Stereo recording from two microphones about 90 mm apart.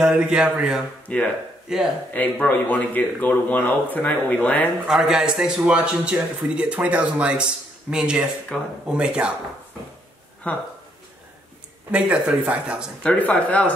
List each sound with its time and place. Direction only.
0.0 s a man's voice: 10° right (ahead or behind)
1.1 s speech: 15° left (ahead or behind)
1.7 s a man's voice: 5° right (ahead or behind)
2.1 s speech: 20° left (ahead or behind)
4.8 s a man's voice: 5° right (ahead or behind)
8.5 s speech: 10° left (ahead or behind)
8.8 s a man's voice: 10° right (ahead or behind)
10.4 s speech: 15° left (ahead or behind)
11.9 s a man's voice: 15° right (ahead or behind)
13.0 s speech: 15° left (ahead or behind)